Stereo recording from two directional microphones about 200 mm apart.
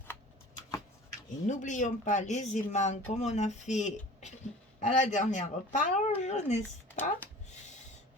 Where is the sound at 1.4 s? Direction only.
40° left (ahead or behind).